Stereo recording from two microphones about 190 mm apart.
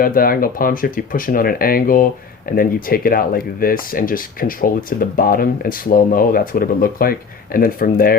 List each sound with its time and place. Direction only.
0.0 s speech: 50° left (ahead or behind)